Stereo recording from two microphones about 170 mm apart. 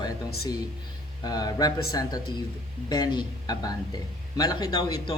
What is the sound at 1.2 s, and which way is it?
Speech, 20° left (ahead or behind).